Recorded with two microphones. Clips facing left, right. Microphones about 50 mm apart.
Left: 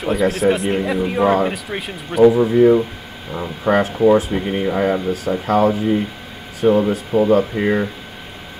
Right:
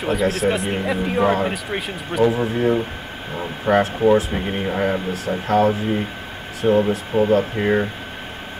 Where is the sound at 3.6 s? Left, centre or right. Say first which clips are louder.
Left 1 dB; left.